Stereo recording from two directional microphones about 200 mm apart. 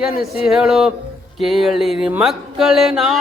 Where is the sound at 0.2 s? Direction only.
Centre (ahead or behind).